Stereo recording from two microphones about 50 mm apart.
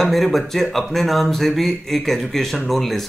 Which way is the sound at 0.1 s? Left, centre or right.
Centre.